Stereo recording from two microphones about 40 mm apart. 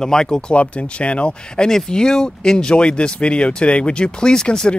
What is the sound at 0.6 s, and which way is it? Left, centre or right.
Speech, left.